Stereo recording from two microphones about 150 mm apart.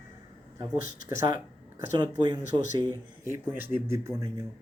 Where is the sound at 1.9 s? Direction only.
30° right (ahead or behind).